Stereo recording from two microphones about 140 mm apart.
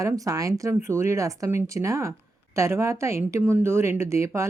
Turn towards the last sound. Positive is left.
turn(degrees=-20)  # may be behind; listen again after turning